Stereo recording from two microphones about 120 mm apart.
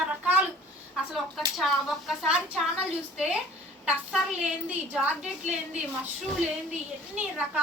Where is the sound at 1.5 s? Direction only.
Centre (ahead or behind).